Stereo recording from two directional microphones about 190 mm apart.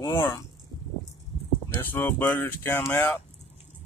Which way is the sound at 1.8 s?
10° left (ahead or behind).